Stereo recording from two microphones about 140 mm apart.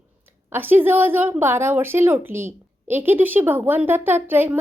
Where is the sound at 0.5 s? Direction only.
15° right (ahead or behind).